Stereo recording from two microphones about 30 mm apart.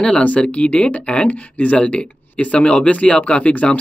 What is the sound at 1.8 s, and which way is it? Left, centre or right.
Speech, left.